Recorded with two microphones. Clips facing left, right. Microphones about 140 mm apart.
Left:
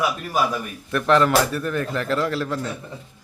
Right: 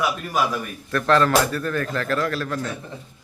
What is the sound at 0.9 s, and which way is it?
A man's voice, 15° left (ahead or behind).